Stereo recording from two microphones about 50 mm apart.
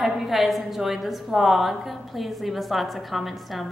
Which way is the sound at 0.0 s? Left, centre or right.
Centre.